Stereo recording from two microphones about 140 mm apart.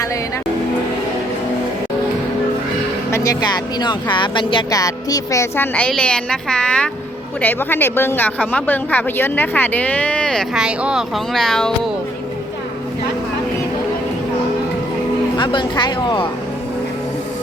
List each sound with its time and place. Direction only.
3.1 s speech: 25° left (ahead or behind); by 10.6 s 5° left (ahead or behind)
10.6 s speech: 5° right (ahead or behind)
15.4 s speech: 35° left (ahead or behind)